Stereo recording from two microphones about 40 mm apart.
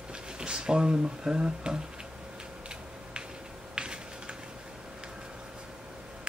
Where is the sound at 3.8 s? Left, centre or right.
Right.